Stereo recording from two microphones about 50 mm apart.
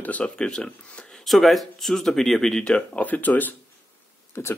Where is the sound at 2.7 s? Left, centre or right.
Left.